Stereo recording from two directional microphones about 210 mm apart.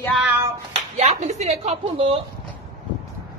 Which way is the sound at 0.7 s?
30° right (ahead or behind).